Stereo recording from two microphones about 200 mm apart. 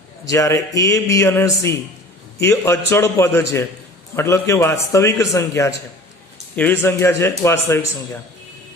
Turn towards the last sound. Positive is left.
turn(degrees=10)  # may be behind; listen again after turning